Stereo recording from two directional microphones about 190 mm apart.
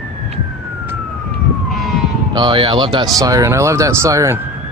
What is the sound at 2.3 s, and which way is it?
Speech, 25° right (ahead or behind).